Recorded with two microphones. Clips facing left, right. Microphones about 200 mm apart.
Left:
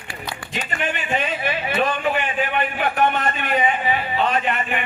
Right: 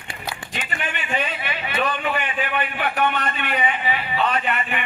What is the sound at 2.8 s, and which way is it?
A man's voice, 45° left (ahead or behind).